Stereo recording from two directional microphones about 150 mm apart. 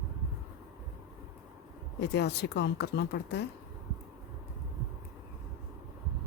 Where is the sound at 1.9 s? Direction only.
90° left.